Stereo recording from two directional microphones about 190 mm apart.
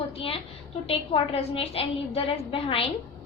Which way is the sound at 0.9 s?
30° left (ahead or behind).